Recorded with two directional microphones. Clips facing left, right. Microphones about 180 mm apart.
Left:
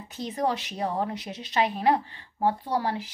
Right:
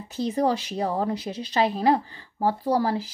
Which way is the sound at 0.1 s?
35° right (ahead or behind).